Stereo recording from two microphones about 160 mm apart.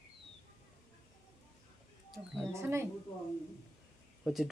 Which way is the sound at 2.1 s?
Centre (ahead or behind).